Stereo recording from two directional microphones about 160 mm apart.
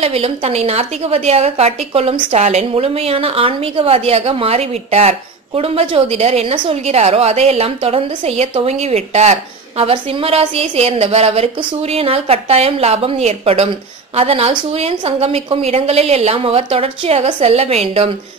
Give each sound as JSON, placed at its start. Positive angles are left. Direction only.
{"t": 0.0, "sound": "a woman's voice", "side_deg": -40}